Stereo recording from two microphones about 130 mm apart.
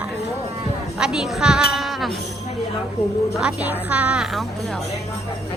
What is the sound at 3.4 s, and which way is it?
A woman's voice, 10° right (ahead or behind).